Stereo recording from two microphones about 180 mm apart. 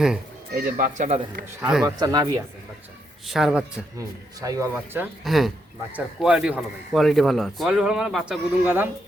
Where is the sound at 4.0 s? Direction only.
20° right (ahead or behind).